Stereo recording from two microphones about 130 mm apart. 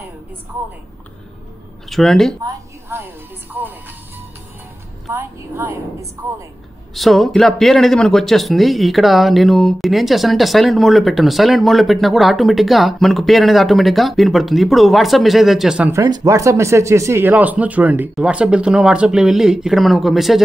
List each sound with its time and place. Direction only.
1.9 s speech: centre (ahead or behind)
2.4 s a woman's voice: 15° right (ahead or behind)
5.1 s speech: 15° right (ahead or behind)
6.9 s speech: centre (ahead or behind)
15.9 s speech: 25° right (ahead or behind); by 20.4 s centre (ahead or behind)